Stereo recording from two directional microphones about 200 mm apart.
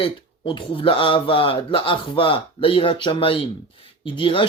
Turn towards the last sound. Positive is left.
turn(degrees=25)  # may be behind; listen again after turning